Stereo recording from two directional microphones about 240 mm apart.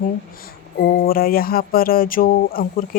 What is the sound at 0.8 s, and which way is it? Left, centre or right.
Speech, left.